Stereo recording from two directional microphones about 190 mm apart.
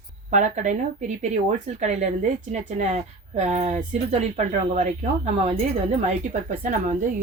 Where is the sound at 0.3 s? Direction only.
40° right (ahead or behind).